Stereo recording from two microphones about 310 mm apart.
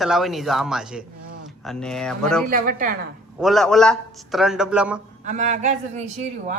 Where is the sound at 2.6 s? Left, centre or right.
Right.